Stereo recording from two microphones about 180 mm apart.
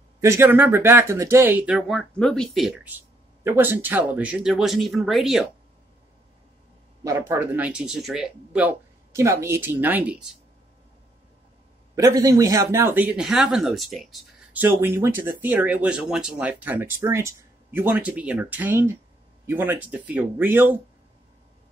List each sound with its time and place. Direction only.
0.2 s speech: 15° right (ahead or behind)
7.0 s speech: 15° right (ahead or behind)
11.9 s speech: 20° right (ahead or behind)